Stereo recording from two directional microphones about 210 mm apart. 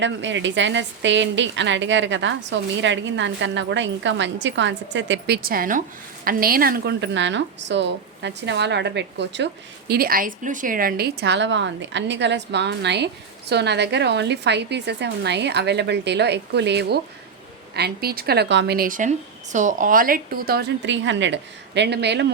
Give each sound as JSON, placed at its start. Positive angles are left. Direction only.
{"t": 0.0, "sound": "a woman's voice", "side_deg": -60}